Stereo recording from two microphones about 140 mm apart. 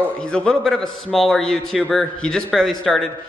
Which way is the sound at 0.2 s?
5° left (ahead or behind).